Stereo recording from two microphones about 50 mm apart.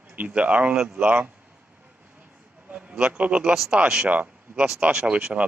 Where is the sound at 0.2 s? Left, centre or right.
Right.